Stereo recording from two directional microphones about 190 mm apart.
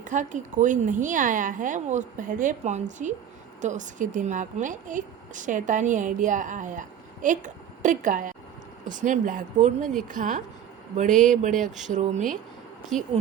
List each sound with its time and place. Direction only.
0.0 s a woman's voice: 40° right (ahead or behind)
12.9 s a woman's voice: centre (ahead or behind)